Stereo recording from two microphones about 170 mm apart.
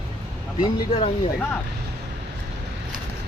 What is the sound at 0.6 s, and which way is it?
Speech, 35° left (ahead or behind).